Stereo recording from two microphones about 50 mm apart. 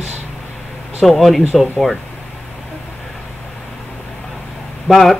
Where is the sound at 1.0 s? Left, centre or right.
Centre.